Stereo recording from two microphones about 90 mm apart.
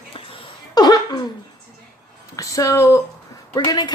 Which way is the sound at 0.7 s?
50° left (ahead or behind).